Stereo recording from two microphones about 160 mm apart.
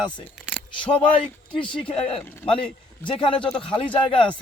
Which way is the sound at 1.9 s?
35° left (ahead or behind).